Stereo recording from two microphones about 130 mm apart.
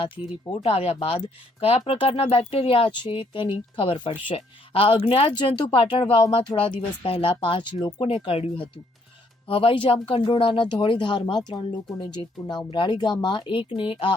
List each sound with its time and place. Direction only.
0.6 s speech: 50° left (ahead or behind)
5.4 s speech: 35° left (ahead or behind)